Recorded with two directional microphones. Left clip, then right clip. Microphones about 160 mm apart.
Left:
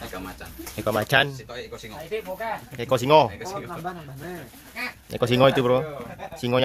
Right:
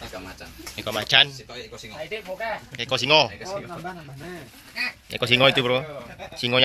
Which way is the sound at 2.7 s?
40° left (ahead or behind).